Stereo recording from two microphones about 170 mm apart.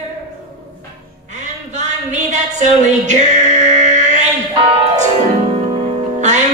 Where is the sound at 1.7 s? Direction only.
45° right (ahead or behind).